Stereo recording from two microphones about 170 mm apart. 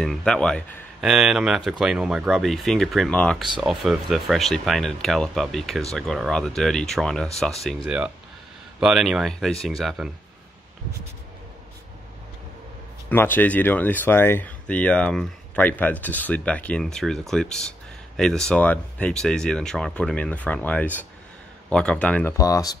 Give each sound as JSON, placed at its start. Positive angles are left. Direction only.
{"t": 0.0, "sound": "speech", "side_deg": 0}
{"t": 13.1, "sound": "speech", "side_deg": 10}
{"t": 22.4, "sound": "speech", "side_deg": 20}